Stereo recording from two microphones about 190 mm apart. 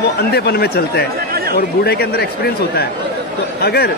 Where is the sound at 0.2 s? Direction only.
55° left (ahead or behind).